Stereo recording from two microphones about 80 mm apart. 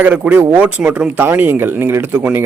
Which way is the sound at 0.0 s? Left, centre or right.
Right.